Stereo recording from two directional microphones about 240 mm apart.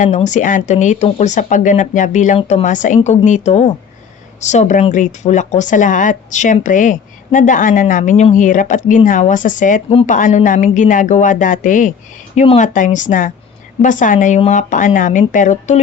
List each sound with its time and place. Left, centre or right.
0.0 s speech: left